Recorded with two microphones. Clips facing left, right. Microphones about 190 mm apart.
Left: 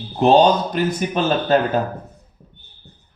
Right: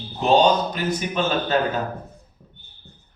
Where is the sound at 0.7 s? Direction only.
50° left (ahead or behind).